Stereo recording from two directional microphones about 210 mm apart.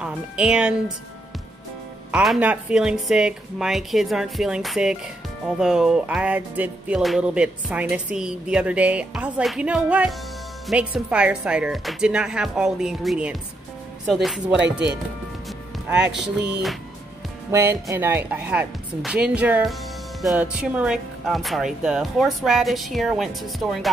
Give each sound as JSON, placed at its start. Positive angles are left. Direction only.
{"t": 0.0, "sound": "music", "side_deg": -5}
{"t": 2.0, "sound": "music", "side_deg": -5}
{"t": 15.9, "sound": "music", "side_deg": -5}
{"t": 16.2, "sound": "music", "side_deg": -50}
{"t": 17.5, "sound": "speech", "side_deg": -10}
{"t": 20.2, "sound": "music", "side_deg": 0}